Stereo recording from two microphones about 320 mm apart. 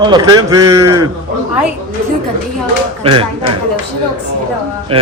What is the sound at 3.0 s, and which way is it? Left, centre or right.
Speech, centre.